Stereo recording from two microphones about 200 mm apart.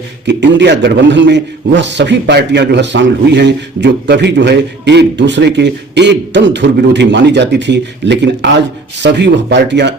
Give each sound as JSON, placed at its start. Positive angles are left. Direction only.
{"t": 0.3, "sound": "a man's voice", "side_deg": -60}